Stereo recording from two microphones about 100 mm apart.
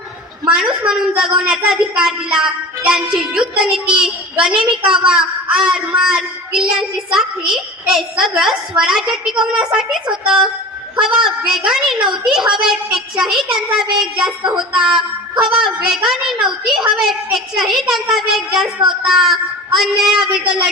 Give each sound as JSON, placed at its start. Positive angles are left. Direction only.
{"t": 0.4, "sound": "a woman's voice", "side_deg": -5}
{"t": 20.4, "sound": "speech", "side_deg": -55}